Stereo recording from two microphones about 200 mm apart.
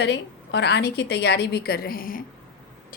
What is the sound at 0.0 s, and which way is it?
A woman's voice, 60° left (ahead or behind).